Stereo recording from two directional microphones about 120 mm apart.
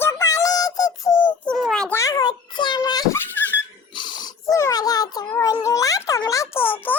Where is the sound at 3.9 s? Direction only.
40° left (ahead or behind).